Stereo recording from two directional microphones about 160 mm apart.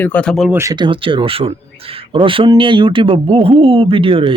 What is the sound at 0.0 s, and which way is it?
Speech, 10° left (ahead or behind).